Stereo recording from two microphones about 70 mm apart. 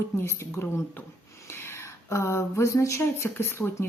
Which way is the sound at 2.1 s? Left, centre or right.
Left.